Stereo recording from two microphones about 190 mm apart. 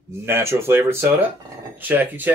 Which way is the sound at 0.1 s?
15° right (ahead or behind).